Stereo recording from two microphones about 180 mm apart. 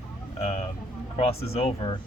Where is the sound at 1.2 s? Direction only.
35° left (ahead or behind).